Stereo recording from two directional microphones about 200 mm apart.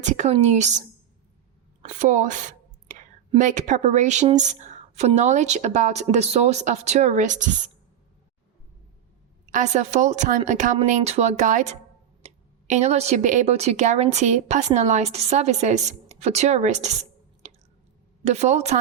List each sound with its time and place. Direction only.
0.0 s speech: 35° right (ahead or behind)
9.5 s speech: 35° right (ahead or behind)